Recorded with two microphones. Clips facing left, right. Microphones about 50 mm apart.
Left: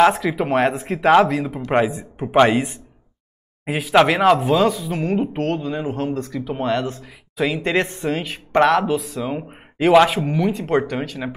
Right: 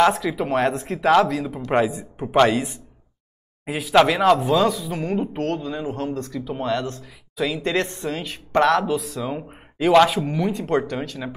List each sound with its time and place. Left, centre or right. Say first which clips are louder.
0.0 s speech: left 3 dB; centre
3.6 s speech: left 1 dB; left; by 6.4 s centre
6.4 s speech: left 4 dB; left
6.7 s speech: left 2 dB; centre
7.3 s speech: left 3 dB; left